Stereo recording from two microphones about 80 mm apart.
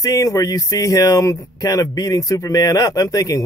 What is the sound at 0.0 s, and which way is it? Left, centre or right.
Speech, left.